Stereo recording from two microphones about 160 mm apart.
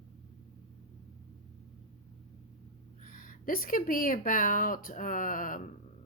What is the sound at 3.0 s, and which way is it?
A woman's voice, 60° left (ahead or behind).